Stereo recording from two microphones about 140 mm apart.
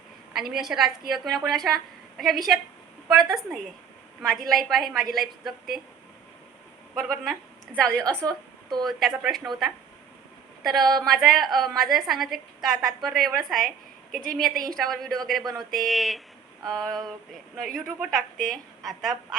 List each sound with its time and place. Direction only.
0.3 s a woman's voice: 5° right (ahead or behind)
3.3 s a woman's voice: centre (ahead or behind)
6.9 s a woman's voice: centre (ahead or behind)
8.1 s a woman's voice: 25° right (ahead or behind)
8.8 s a woman's voice: centre (ahead or behind)
10.6 s a woman's voice: centre (ahead or behind)